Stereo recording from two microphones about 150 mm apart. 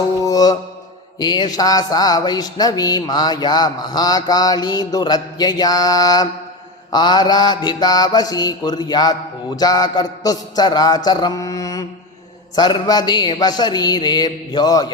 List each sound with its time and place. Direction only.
0.2 s mantra: 25° left (ahead or behind)
1.2 s speech: 30° left (ahead or behind)